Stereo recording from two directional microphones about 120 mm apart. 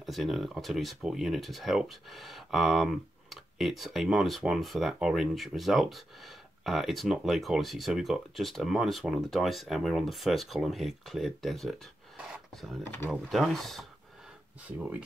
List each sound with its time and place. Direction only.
0.0 s speech: centre (ahead or behind)
12.2 s a sound: 5° right (ahead or behind)
13.3 s speech: centre (ahead or behind)
14.8 s speech: 10° right (ahead or behind)